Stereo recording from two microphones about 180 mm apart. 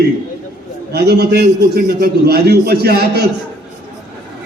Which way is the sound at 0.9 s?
65° right (ahead or behind).